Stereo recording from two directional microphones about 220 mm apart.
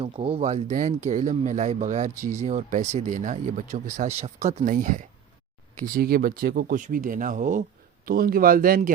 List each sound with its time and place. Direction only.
0.0 s speech: 25° right (ahead or behind); by 8.9 s 40° right (ahead or behind)